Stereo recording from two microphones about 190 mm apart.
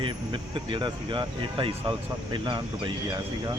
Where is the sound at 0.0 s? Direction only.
25° right (ahead or behind).